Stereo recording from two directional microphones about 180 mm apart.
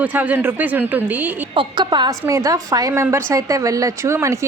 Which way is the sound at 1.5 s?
25° right (ahead or behind).